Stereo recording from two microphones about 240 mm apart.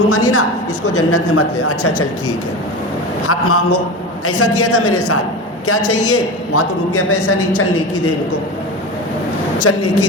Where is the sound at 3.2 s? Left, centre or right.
Left.